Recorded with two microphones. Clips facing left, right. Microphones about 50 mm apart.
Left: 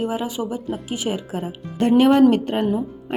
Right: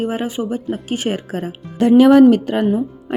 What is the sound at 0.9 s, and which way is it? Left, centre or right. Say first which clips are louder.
Speech: right 4 dB; right.